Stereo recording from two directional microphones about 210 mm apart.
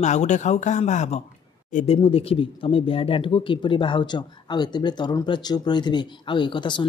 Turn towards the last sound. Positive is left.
turn(degrees=20)  # may be behind; listen again after turning